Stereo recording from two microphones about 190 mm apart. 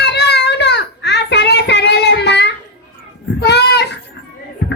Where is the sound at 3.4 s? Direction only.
60° left (ahead or behind).